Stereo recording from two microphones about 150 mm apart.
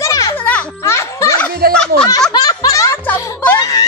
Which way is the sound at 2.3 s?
30° left (ahead or behind).